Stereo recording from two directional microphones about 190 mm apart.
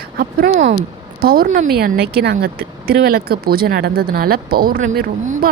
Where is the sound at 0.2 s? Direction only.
45° right (ahead or behind).